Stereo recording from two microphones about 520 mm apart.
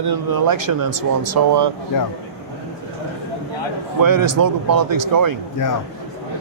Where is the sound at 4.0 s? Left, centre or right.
Right.